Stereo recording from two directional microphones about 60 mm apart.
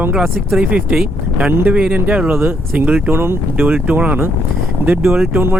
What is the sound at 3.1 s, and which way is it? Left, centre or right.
Speech, right.